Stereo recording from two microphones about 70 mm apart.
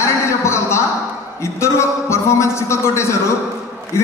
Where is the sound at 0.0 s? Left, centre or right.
Left.